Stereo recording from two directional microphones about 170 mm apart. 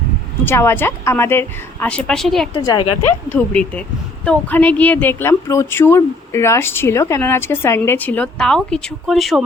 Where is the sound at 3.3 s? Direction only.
5° left (ahead or behind).